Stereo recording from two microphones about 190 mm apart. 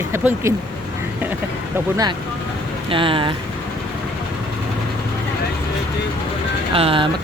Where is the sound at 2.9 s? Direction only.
25° right (ahead or behind).